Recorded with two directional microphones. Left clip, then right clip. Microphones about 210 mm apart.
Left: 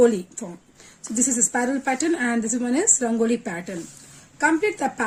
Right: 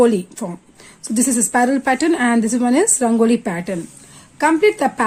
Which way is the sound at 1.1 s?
40° right (ahead or behind).